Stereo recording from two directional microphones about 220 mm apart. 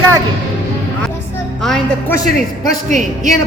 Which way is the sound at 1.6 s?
Centre (ahead or behind).